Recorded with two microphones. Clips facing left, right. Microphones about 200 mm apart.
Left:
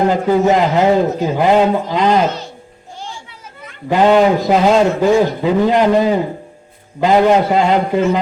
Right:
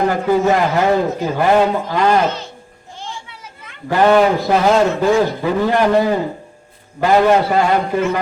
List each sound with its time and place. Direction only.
0.1 s a man's voice: 20° left (ahead or behind)
3.8 s a man's voice: 20° left (ahead or behind)